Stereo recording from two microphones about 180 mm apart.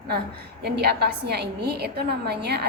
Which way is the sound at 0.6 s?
65° right (ahead or behind).